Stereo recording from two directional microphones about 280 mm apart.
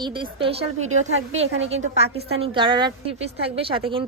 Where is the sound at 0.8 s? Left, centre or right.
Right.